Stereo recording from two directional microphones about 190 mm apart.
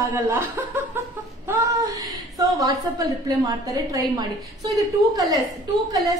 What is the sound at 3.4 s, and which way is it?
Speech, 20° right (ahead or behind).